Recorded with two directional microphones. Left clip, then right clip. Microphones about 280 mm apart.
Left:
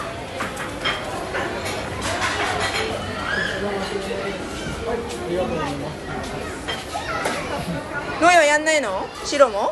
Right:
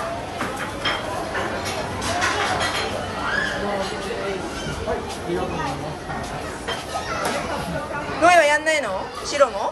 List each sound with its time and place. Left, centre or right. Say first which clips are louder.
8.2 s speech: even; centre